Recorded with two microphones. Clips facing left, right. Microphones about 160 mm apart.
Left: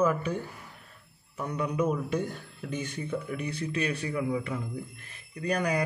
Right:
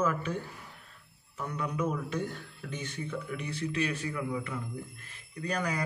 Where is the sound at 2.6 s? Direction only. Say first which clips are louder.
Left 5 dB; 20° left (ahead or behind).